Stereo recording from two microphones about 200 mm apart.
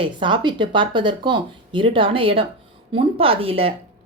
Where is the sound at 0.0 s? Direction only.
25° right (ahead or behind).